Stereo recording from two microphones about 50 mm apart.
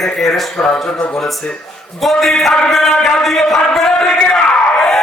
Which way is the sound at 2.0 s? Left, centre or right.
Centre.